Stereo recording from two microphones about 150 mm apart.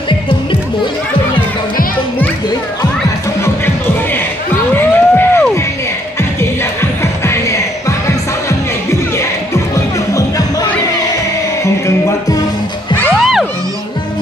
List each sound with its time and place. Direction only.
3.4 s music: 15° left (ahead or behind)
4.7 s a sound: 15° left (ahead or behind)
6.4 s music: 15° left (ahead or behind)
10.1 s music: 25° left (ahead or behind)
13.1 s music: centre (ahead or behind)